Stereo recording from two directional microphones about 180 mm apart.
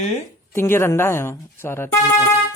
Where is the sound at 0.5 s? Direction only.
15° left (ahead or behind).